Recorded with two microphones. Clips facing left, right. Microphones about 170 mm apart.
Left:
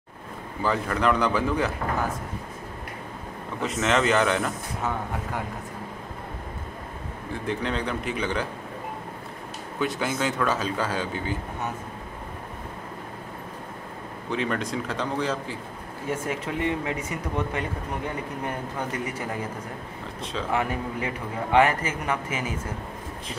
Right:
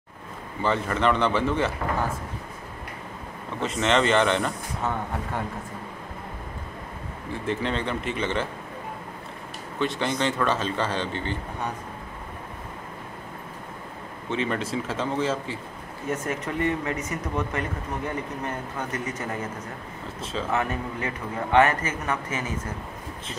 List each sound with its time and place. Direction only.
0.6 s speech: centre (ahead or behind)
3.6 s speech: centre (ahead or behind)
7.4 s speech: centre (ahead or behind)
9.8 s speech: 5° left (ahead or behind)
14.3 s speech: centre (ahead or behind)
16.1 s a man's voice: 10° left (ahead or behind)
20.5 s a man's voice: 15° left (ahead or behind)